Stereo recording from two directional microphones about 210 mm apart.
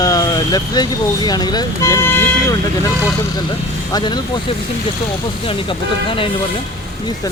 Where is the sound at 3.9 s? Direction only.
20° left (ahead or behind).